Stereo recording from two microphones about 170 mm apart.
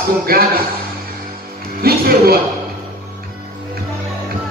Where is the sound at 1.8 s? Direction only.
65° right (ahead or behind).